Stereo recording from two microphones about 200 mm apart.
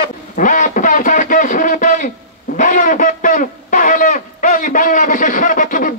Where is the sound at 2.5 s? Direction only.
40° left (ahead or behind).